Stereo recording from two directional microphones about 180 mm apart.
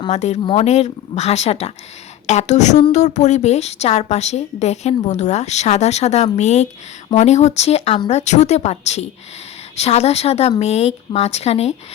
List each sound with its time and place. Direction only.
0.1 s a woman's voice: 40° left (ahead or behind)